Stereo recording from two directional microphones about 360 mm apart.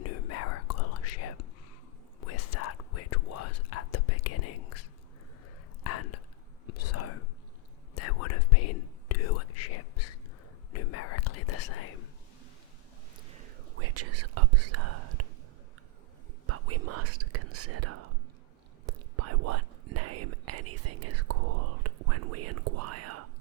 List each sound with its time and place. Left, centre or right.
0.0 s whispering: left
5.8 s whispering: left
13.7 s whispering: right
16.5 s whispering: right